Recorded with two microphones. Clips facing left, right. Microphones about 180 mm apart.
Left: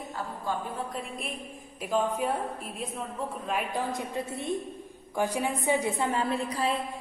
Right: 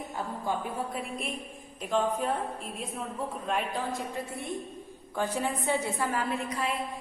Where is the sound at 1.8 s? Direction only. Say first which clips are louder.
Left 1 dB; 10° left (ahead or behind).